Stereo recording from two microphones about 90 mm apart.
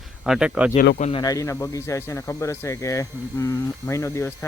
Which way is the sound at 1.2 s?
40° left (ahead or behind).